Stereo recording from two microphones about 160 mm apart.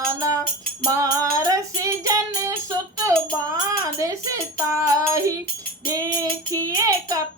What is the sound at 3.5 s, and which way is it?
Music, 20° right (ahead or behind).